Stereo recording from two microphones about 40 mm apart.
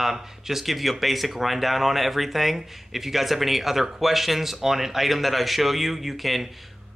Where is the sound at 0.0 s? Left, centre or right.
Centre.